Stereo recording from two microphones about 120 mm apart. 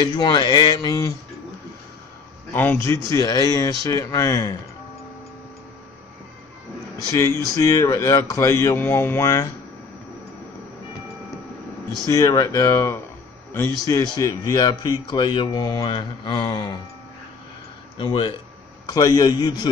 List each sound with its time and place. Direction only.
0.0 s speech: 35° left (ahead or behind)
2.5 s a man's voice: 15° left (ahead or behind)
3.1 s speech: 30° left (ahead or behind)
7.1 s speech: 30° left (ahead or behind)
12.0 s a man's voice: 30° left (ahead or behind)
13.7 s speech: 30° left (ahead or behind)
17.9 s speech: 45° left (ahead or behind)